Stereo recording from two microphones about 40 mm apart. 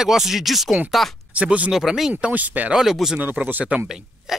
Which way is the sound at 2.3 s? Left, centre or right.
Right.